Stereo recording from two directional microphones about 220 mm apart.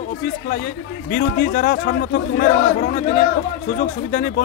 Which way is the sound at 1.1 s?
45° left (ahead or behind).